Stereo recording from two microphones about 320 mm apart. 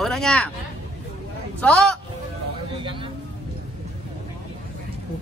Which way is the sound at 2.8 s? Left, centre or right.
Centre.